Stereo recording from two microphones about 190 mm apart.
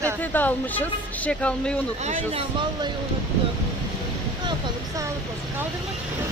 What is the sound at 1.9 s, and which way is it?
Speech, 35° right (ahead or behind).